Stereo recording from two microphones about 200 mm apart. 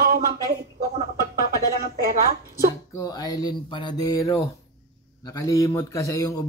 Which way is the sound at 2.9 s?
15° left (ahead or behind).